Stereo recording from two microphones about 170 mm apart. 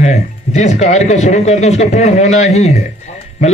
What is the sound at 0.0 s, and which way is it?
A man's voice, 40° left (ahead or behind).